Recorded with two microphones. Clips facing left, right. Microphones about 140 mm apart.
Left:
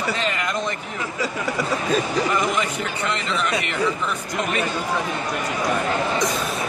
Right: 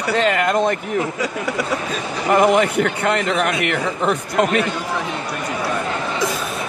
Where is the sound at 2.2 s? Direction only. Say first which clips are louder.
Right 8 dB; 60° right (ahead or behind).